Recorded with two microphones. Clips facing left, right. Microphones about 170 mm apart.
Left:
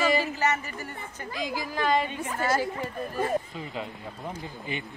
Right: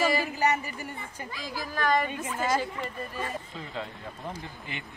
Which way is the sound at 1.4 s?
15° left (ahead or behind).